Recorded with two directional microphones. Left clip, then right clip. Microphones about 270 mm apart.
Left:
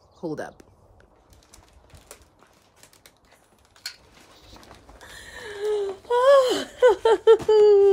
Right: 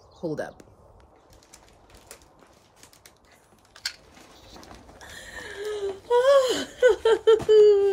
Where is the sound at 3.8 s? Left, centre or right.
Right.